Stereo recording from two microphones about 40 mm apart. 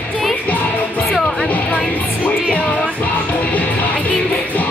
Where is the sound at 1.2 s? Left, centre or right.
Left.